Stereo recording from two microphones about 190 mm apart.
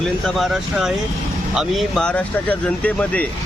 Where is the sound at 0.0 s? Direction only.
Centre (ahead or behind).